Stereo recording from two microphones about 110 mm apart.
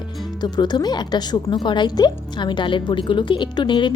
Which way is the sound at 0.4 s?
40° left (ahead or behind).